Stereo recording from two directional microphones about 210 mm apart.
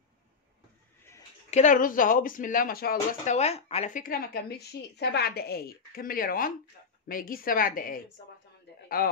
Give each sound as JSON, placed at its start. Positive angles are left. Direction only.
{"t": 1.5, "sound": "speech", "side_deg": 35}
{"t": 3.3, "sound": "a woman's voice", "side_deg": 30}
{"t": 8.8, "sound": "a sound", "side_deg": 45}